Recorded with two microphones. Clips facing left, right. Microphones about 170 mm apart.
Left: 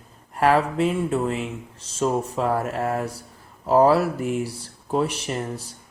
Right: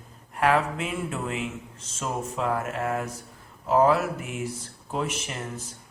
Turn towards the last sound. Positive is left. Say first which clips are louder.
# left 6 dB
turn(degrees=35)  # may be behind; listen again after turning